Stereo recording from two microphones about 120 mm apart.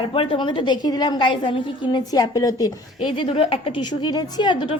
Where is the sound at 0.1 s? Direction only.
45° left (ahead or behind).